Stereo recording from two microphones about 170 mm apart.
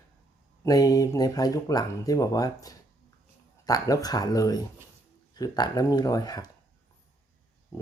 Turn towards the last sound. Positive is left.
turn(degrees=20)  # may be behind; listen again after turning